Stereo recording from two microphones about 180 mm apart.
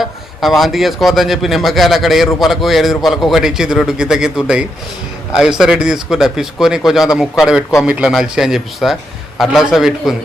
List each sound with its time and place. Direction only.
0.0 s a man's voice: centre (ahead or behind)